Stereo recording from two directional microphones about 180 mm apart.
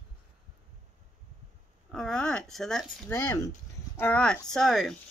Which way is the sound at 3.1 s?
15° left (ahead or behind).